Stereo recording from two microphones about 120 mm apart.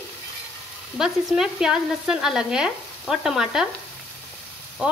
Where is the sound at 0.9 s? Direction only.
5° right (ahead or behind).